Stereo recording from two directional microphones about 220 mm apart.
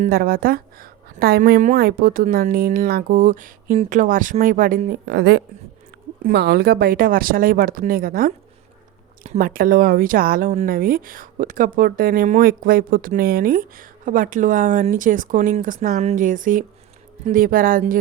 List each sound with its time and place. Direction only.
0.0 s speech: 40° right (ahead or behind)